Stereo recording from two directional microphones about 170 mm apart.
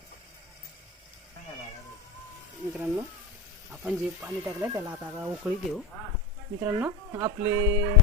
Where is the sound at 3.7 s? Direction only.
5° right (ahead or behind).